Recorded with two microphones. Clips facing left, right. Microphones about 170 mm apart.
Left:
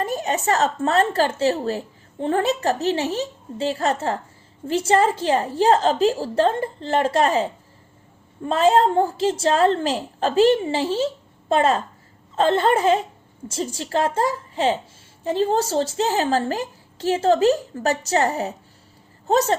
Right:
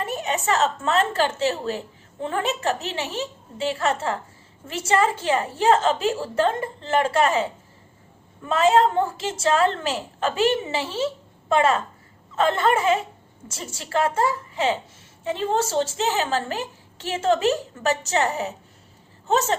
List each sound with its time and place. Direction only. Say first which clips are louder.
0.0 s a woman's voice: left 3 dB; 40° left (ahead or behind)
8.4 s a woman's voice: left 1 dB; 35° left (ahead or behind)